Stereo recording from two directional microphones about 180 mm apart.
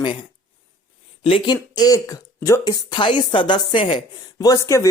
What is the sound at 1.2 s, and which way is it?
Speech, 25° left (ahead or behind).